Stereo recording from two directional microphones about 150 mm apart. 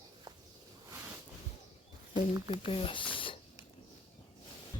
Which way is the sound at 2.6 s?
35° left (ahead or behind).